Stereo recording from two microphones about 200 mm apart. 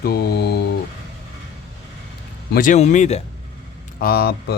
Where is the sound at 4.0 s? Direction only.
50° left (ahead or behind).